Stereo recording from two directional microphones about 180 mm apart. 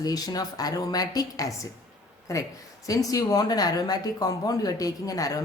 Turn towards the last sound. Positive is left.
turn(degrees=20)  # may be behind; listen again after turning